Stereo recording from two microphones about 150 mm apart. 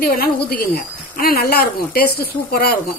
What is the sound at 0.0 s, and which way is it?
Speech, 90° left.